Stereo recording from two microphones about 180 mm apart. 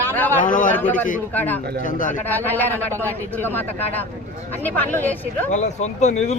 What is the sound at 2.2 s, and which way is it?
Speech, 10° left (ahead or behind).